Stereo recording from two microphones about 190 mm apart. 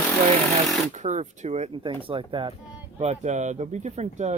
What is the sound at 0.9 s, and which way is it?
Speech, 40° right (ahead or behind).